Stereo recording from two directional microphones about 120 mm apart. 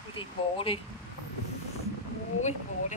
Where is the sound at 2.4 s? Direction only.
80° left.